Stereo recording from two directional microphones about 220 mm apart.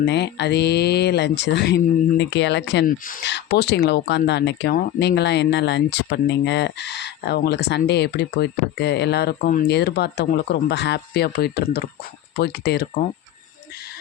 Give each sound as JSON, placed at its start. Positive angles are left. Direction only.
{"t": 0.0, "sound": "speech", "side_deg": 50}